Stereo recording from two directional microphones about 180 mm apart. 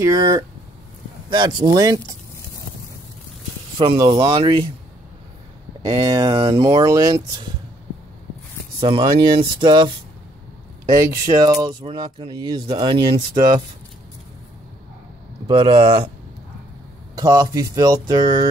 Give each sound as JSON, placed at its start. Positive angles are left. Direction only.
{"t": 0.0, "sound": "speech", "side_deg": -20}
{"t": 3.7, "sound": "speech", "side_deg": -30}
{"t": 5.8, "sound": "speech", "side_deg": -20}
{"t": 8.7, "sound": "speech", "side_deg": -25}
{"t": 15.4, "sound": "speech", "side_deg": -30}
{"t": 17.1, "sound": "speech", "side_deg": -20}